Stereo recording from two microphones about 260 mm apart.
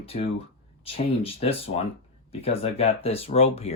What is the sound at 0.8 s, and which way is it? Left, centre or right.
Speech, left.